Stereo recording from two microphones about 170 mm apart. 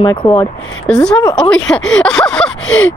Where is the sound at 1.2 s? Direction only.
25° left (ahead or behind).